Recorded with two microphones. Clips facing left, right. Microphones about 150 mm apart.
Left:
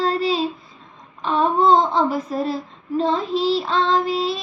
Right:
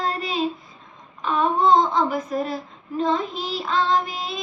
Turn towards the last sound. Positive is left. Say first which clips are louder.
# left 4 dB
turn(degrees=30)  # may be behind; listen again after turning